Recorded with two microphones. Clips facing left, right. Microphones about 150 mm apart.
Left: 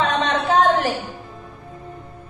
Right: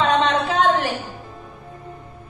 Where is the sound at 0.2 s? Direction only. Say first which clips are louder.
Left 1 dB; 40° left (ahead or behind).